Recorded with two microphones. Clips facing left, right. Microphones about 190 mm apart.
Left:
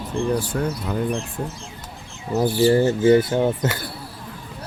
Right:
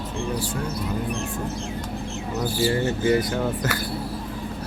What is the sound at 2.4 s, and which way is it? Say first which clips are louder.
Speech: left 7 dB; 30° left (ahead or behind).